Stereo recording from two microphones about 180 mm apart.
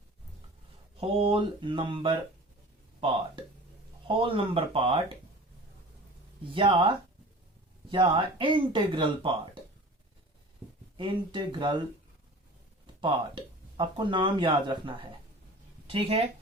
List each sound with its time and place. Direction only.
0.9 s speech: 30° right (ahead or behind)
4.0 s speech: 30° right (ahead or behind)
6.5 s speech: 30° right (ahead or behind)
10.9 s speech: 25° right (ahead or behind)
13.0 s speech: 25° right (ahead or behind)